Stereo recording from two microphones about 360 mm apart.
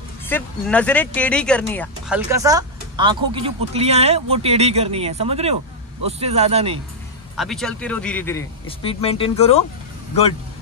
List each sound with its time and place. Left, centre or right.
0.3 s speech: centre
7.3 s speech: centre